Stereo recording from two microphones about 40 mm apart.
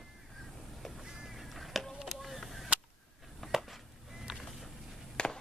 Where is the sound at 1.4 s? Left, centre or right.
Centre.